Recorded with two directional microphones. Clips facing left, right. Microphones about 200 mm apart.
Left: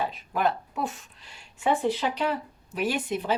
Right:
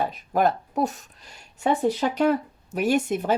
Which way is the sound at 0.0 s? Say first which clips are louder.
Right 4 dB; 45° right (ahead or behind).